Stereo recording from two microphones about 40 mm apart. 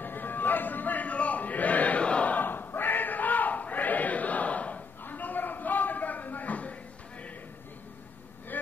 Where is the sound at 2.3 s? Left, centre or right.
Left.